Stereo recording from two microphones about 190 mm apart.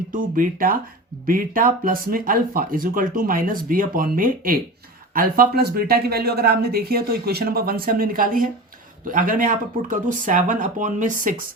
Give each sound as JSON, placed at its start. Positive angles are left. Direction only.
{"t": 0.1, "sound": "speech", "side_deg": -45}